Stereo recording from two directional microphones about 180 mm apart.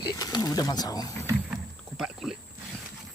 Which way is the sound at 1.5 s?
Centre (ahead or behind).